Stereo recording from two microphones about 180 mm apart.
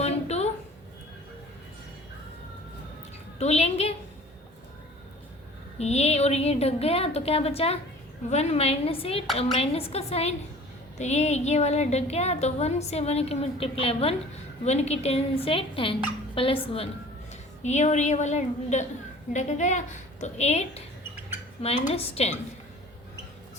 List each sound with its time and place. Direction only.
0.0 s a sound: 35° left (ahead or behind)
3.3 s a woman's voice: 35° left (ahead or behind)
5.8 s a woman's voice: 35° left (ahead or behind)
17.6 s a woman's voice: 40° left (ahead or behind)